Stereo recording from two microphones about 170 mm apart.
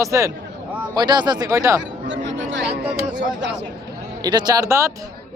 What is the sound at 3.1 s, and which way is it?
Speech, 90° right.